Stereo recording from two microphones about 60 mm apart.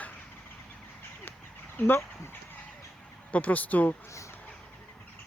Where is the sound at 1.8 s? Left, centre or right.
Left.